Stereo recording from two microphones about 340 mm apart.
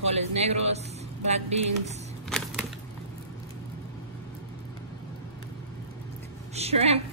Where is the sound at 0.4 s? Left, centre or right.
Centre.